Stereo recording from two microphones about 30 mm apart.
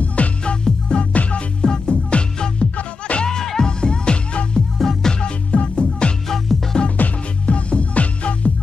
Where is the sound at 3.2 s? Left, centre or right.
Centre.